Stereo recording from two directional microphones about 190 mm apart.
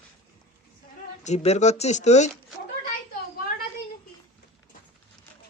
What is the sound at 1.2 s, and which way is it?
Speech, 35° left (ahead or behind).